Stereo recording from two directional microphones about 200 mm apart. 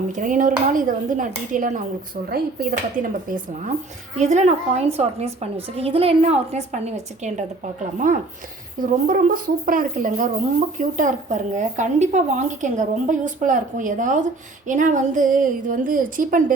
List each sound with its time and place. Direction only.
0.1 s a woman's voice: 40° right (ahead or behind)